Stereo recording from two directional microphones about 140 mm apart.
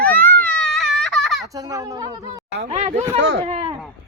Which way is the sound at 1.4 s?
25° right (ahead or behind).